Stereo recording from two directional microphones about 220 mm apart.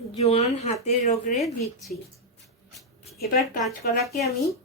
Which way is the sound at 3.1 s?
Centre (ahead or behind).